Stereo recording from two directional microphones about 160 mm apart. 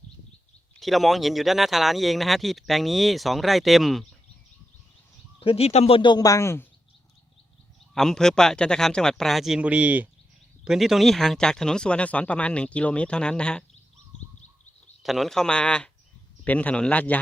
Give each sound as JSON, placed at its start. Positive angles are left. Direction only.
{"t": 0.8, "sound": "speech", "side_deg": 0}
{"t": 5.4, "sound": "speech", "side_deg": 35}
{"t": 7.9, "sound": "speech", "side_deg": 5}
{"t": 15.0, "sound": "speech", "side_deg": 0}